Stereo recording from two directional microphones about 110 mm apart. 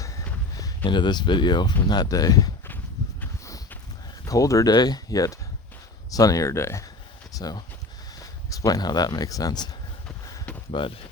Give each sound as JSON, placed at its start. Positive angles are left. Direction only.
{"t": 0.9, "sound": "speech", "side_deg": 45}
{"t": 4.3, "sound": "speech", "side_deg": 30}
{"t": 7.3, "sound": "speech", "side_deg": 35}
{"t": 10.7, "sound": "speech", "side_deg": 55}